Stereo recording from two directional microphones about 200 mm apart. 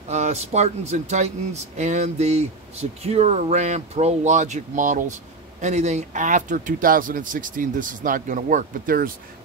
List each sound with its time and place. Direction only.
0.1 s speech: 35° right (ahead or behind)